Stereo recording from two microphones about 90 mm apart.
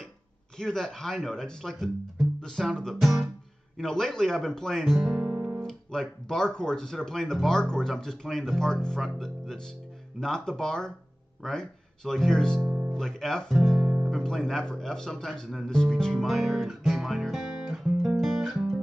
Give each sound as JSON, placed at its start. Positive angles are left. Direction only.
{"t": 0.6, "sound": "speech", "side_deg": 5}
{"t": 5.1, "sound": "guitar", "side_deg": -10}
{"t": 5.6, "sound": "speech", "side_deg": 5}
{"t": 12.6, "sound": "guitar", "side_deg": -15}
{"t": 12.9, "sound": "speech", "side_deg": 5}